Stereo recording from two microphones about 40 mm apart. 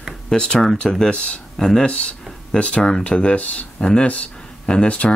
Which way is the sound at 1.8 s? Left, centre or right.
Left.